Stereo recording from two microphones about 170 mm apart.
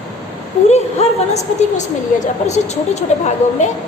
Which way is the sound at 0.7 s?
40° left (ahead or behind).